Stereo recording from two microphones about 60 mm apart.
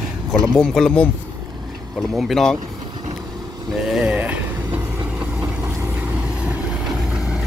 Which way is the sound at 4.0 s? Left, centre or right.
Right.